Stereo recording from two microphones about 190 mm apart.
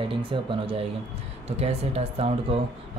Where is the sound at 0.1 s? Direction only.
30° right (ahead or behind).